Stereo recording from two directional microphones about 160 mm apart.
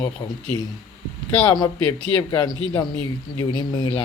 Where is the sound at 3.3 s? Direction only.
25° left (ahead or behind).